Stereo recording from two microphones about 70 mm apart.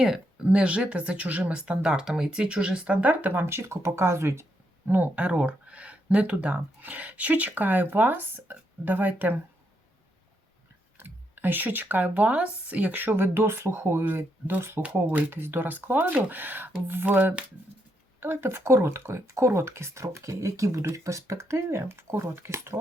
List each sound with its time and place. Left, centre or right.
0.4 s speech: centre; by 4.4 s right
4.9 s speech: right
10.9 s speech: right